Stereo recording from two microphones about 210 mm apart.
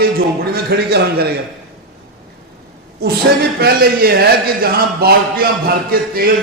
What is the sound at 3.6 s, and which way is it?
A man's voice, 45° right (ahead or behind).